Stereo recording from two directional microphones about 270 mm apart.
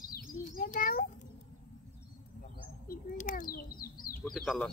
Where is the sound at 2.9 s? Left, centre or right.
Left.